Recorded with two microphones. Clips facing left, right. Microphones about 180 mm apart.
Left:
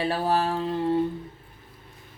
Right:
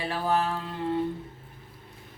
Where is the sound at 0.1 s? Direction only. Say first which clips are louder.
Left 2 dB; 35° left (ahead or behind).